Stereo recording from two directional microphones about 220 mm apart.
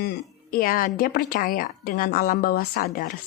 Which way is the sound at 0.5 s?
40° left (ahead or behind).